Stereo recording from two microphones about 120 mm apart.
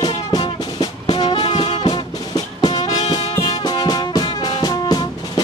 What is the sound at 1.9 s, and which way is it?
Music, 35° left (ahead or behind).